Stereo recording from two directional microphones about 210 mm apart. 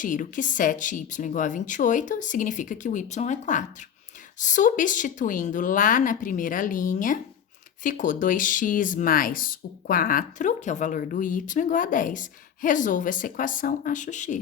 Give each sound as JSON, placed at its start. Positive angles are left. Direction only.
{"t": 0.0, "sound": "speech", "side_deg": 40}